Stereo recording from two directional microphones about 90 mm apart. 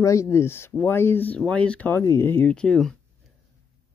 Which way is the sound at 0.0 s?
35° left (ahead or behind).